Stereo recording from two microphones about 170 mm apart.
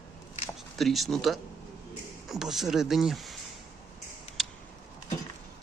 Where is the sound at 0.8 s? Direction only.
Centre (ahead or behind).